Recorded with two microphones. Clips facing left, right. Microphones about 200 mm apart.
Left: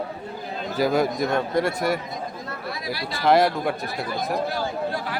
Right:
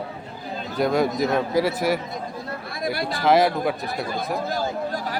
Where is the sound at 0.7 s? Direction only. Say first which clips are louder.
Even; centre (ahead or behind).